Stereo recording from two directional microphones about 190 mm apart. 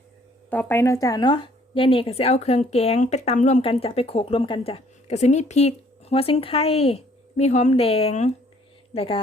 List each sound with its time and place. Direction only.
0.5 s a woman's voice: 10° left (ahead or behind); by 9.2 s 30° left (ahead or behind)